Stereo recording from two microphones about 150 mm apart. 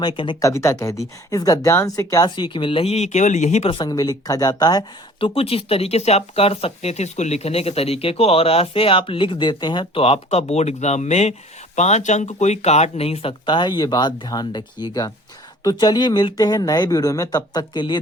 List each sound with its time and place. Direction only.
0.0 s speech: 35° left (ahead or behind)
0.4 s speech: 20° left (ahead or behind); by 3.7 s 50° left (ahead or behind)
3.7 s speech: 30° left (ahead or behind)